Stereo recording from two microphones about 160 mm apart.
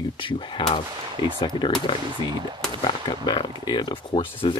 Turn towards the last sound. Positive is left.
turn(degrees=35)  # may be behind; listen again after turning